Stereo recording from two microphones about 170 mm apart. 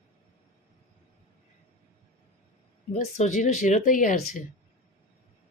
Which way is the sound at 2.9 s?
40° left (ahead or behind).